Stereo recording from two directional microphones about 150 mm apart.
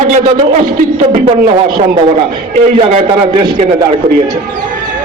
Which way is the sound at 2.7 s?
40° right (ahead or behind).